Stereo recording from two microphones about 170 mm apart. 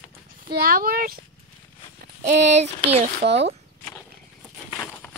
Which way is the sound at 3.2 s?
90° right.